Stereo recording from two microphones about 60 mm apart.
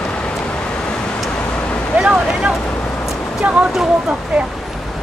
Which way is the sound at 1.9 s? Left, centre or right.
Centre.